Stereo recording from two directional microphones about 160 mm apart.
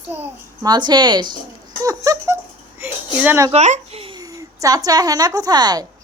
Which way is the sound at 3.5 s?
40° right (ahead or behind).